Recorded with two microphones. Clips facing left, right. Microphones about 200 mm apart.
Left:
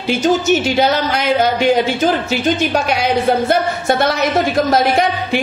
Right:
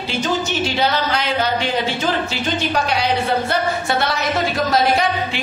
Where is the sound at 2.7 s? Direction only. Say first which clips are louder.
Left 3 dB; 45° left (ahead or behind).